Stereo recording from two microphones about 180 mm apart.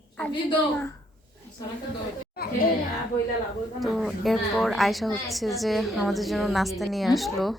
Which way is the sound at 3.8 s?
Centre (ahead or behind).